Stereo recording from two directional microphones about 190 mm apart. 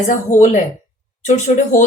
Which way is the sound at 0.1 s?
40° left (ahead or behind).